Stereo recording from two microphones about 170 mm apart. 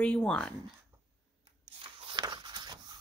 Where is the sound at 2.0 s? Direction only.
30° right (ahead or behind).